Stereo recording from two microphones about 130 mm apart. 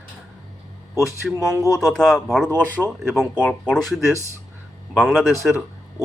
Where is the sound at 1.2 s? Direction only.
Centre (ahead or behind).